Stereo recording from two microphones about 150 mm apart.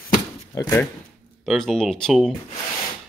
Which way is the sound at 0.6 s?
20° left (ahead or behind).